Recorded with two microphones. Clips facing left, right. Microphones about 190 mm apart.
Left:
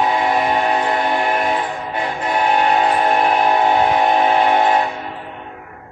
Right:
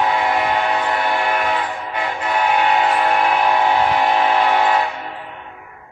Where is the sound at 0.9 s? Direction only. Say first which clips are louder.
Left 1 dB; 25° left (ahead or behind).